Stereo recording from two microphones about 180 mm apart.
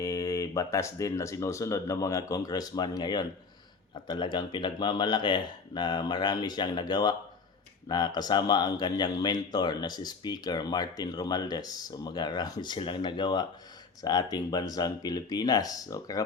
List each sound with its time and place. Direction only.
0.0 s speech: 20° left (ahead or behind)